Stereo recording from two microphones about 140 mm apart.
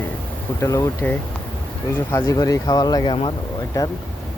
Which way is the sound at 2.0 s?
20° left (ahead or behind).